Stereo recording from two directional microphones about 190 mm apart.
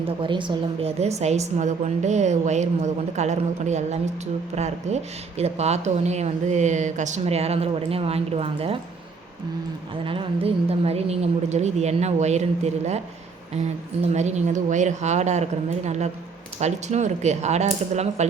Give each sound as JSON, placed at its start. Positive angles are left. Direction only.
{"t": 0.0, "sound": "a woman's voice", "side_deg": -25}
{"t": 9.9, "sound": "a woman's voice", "side_deg": -25}
{"t": 14.1, "sound": "a woman's voice", "side_deg": -35}